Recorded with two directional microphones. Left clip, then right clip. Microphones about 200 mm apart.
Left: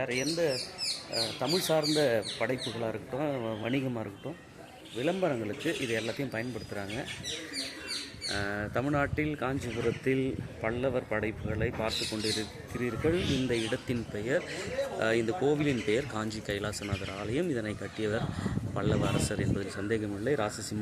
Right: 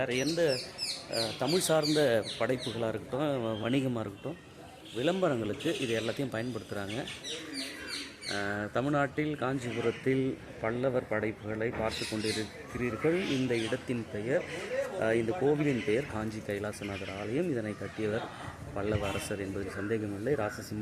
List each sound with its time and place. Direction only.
0.0 s speech: 15° right (ahead or behind)
0.5 s speech: 5° right (ahead or behind)
5.0 s speech: 15° right (ahead or behind)
8.3 s speech: 5° right (ahead or behind)